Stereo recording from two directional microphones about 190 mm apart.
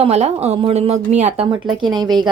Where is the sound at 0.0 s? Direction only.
35° right (ahead or behind).